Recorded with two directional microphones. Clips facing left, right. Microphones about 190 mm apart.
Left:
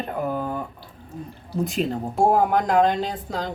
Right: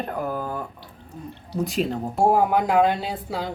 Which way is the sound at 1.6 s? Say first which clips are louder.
Even; centre (ahead or behind).